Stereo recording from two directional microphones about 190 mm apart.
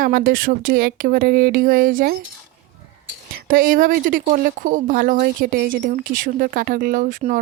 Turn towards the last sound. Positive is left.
turn(degrees=-45)  # may be behind; listen again after turning